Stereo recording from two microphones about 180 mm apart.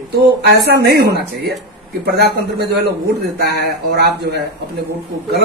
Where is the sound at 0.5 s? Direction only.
65° right (ahead or behind).